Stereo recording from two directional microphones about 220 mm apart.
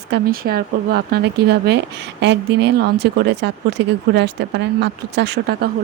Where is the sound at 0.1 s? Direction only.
45° right (ahead or behind).